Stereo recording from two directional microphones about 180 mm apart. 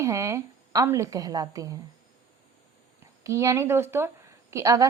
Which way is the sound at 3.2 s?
15° right (ahead or behind).